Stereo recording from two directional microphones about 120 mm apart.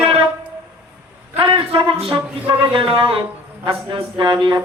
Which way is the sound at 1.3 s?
50° right (ahead or behind).